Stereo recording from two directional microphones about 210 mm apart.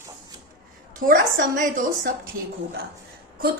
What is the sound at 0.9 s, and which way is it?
Speech, 40° right (ahead or behind).